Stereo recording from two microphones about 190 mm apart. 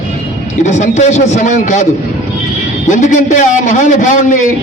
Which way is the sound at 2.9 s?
40° left (ahead or behind).